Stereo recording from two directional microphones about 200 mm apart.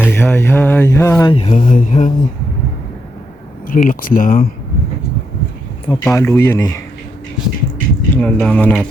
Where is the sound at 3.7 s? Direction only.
40° left (ahead or behind).